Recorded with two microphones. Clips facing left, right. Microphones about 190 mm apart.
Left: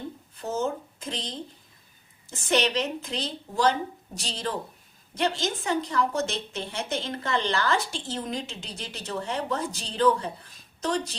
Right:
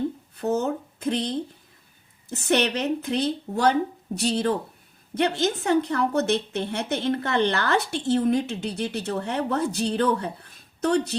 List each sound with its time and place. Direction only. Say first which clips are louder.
0.3 s a woman's voice: right 4 dB; 60° right (ahead or behind)